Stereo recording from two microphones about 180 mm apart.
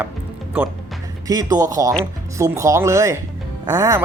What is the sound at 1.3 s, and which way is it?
Speech, 20° right (ahead or behind).